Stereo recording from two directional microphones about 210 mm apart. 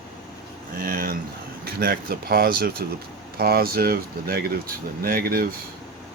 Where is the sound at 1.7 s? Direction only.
45° right (ahead or behind).